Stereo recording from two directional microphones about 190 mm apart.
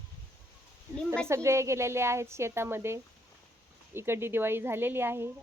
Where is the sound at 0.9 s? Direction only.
5° left (ahead or behind).